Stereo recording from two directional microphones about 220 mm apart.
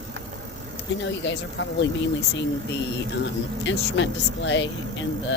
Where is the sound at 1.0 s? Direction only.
55° left (ahead or behind).